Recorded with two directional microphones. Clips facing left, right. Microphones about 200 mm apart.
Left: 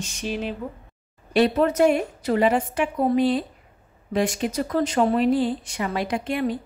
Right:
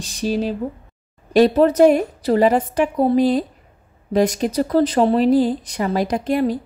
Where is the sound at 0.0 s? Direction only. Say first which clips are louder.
Right 7 dB; 35° right (ahead or behind).